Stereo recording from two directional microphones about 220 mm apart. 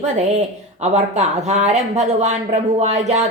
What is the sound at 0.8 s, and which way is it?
Speech, 30° right (ahead or behind).